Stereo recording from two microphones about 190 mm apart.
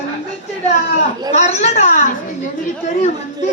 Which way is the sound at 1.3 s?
35° left (ahead or behind).